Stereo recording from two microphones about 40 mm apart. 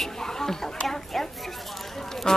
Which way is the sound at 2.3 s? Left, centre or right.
Centre.